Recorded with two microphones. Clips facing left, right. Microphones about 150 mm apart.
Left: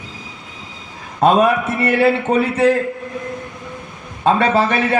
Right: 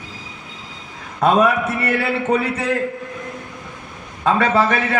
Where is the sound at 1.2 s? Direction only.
30° left (ahead or behind).